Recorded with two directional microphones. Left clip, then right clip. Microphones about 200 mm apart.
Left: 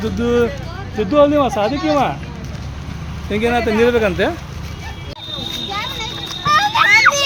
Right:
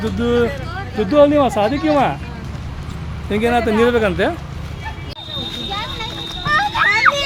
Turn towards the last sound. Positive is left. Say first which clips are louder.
# left 3 dB
turn(degrees=55)  # may be behind; listen again after turning